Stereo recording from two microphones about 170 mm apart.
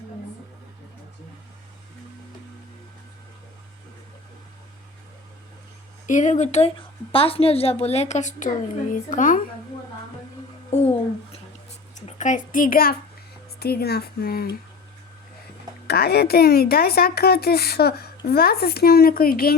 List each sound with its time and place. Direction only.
6.1 s a woman's voice: 45° left (ahead or behind)
10.7 s a woman's voice: 40° left (ahead or behind); by 14.5 s 65° left (ahead or behind)
15.9 s speech: 70° left (ahead or behind)